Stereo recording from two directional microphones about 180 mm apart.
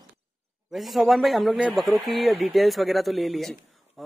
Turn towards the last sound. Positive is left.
turn(degrees=0)  # may be behind; listen again after turning